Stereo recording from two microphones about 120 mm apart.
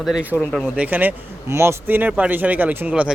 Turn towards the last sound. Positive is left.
turn(degrees=-10)  # may be behind; listen again after turning